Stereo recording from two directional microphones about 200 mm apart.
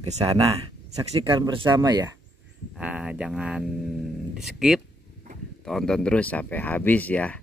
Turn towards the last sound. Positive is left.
turn(degrees=5)  # may be behind; listen again after turning